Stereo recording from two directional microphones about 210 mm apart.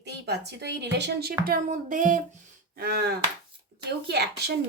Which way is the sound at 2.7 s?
50° right (ahead or behind).